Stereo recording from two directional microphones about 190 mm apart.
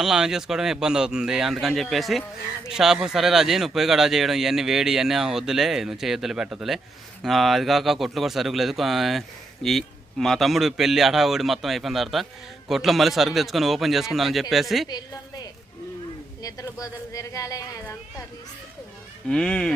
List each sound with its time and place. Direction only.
0.0 s a man's voice: 5° right (ahead or behind)
14.8 s a woman's voice: 20° left (ahead or behind)
19.3 s a man's voice: 5° left (ahead or behind)